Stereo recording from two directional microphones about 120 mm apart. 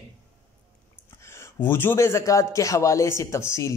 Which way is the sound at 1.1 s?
20° left (ahead or behind).